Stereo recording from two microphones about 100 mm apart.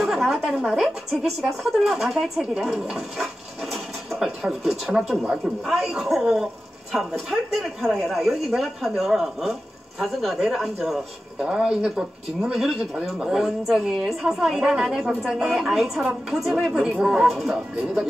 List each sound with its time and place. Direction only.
0.0 s a woman's voice: centre (ahead or behind)